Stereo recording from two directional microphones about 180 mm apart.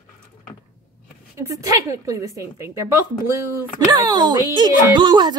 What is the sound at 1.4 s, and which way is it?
A woman's voice, 20° right (ahead or behind).